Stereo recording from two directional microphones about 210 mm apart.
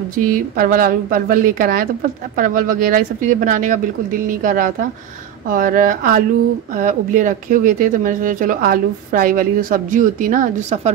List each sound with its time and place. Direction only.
0.1 s speech: 40° right (ahead or behind)